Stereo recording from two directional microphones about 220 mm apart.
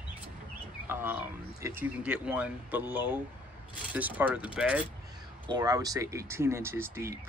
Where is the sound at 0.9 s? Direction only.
10° right (ahead or behind).